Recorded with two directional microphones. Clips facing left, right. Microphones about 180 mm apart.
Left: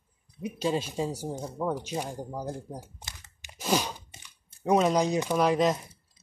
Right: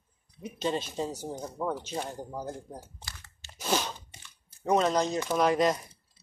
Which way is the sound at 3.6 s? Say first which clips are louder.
Left 2 dB; 5° left (ahead or behind).